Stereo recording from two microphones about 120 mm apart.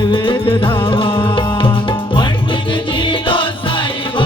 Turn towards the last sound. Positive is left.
turn(degrees=45)  # may be behind; listen again after turning